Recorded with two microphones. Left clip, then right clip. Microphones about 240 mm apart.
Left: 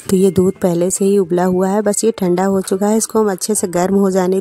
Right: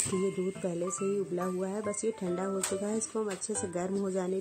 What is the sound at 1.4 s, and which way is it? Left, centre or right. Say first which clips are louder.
Speech: left 19 dB; left.